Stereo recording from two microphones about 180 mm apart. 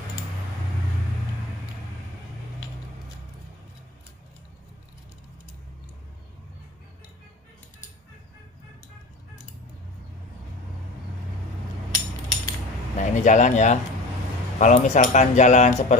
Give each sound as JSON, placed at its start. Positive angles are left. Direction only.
{"t": 12.9, "sound": "speech", "side_deg": 40}